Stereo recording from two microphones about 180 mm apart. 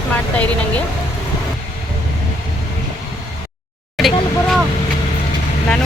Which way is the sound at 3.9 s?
Centre (ahead or behind).